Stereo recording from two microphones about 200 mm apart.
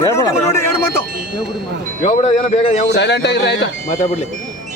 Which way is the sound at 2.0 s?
35° left (ahead or behind).